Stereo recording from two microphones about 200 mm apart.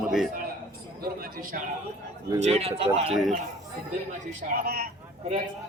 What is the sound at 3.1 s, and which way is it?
Speech, centre (ahead or behind).